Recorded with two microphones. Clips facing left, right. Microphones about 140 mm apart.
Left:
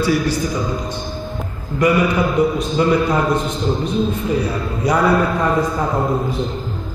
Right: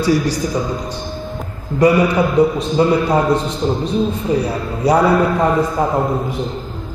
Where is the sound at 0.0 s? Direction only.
35° right (ahead or behind).